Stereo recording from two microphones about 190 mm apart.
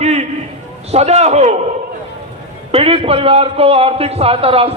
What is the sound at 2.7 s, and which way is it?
A man's voice, 30° right (ahead or behind).